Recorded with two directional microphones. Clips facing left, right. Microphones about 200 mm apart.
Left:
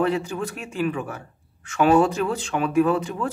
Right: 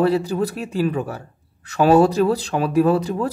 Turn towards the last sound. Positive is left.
turn(degrees=-35)  # may be behind; listen again after turning